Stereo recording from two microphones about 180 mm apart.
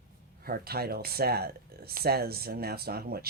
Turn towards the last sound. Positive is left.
turn(degrees=-60)  # may be behind; listen again after turning